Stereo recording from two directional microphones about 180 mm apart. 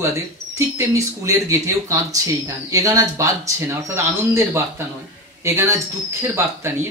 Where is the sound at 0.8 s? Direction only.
15° right (ahead or behind).